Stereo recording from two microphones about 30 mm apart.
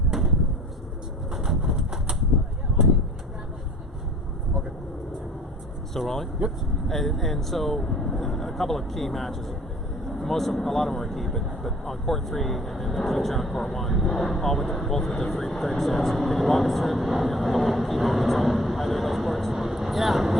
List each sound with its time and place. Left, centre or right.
0.1 s a sound: centre
1.5 s bird: centre
5.9 s speech: centre